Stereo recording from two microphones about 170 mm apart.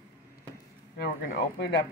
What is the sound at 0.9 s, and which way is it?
Speech, 70° left (ahead or behind).